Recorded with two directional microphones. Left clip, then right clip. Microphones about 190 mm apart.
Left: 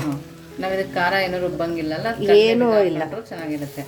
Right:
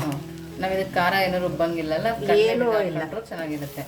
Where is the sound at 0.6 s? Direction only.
5° left (ahead or behind).